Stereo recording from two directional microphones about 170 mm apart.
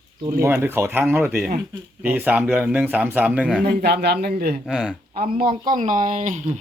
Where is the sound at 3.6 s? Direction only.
75° right (ahead or behind).